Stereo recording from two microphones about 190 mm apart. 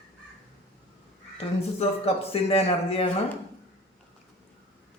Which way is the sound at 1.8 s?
30° left (ahead or behind).